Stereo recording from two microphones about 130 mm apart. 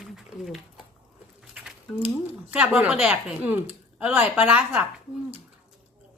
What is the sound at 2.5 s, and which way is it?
Speech, 10° right (ahead or behind).